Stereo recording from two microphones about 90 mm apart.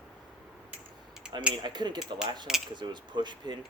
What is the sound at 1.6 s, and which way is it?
Speech, 55° right (ahead or behind).